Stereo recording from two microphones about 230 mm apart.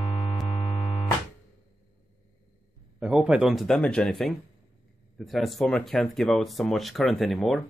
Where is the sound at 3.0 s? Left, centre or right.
Centre.